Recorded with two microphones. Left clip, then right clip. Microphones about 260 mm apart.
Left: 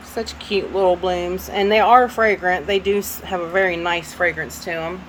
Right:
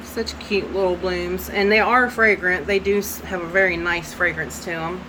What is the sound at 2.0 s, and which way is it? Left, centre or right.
Speech, left.